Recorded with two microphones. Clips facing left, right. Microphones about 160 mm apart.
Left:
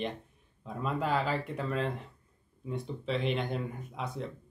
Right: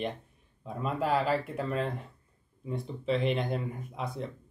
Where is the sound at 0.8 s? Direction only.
Centre (ahead or behind).